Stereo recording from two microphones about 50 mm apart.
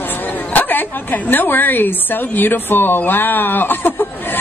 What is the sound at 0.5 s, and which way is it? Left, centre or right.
A woman's voice, left.